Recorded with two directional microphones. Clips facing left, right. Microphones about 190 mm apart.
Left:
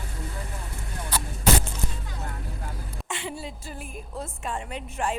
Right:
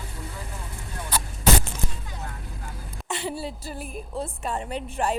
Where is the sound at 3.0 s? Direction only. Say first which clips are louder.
Right 5 dB; 40° right (ahead or behind).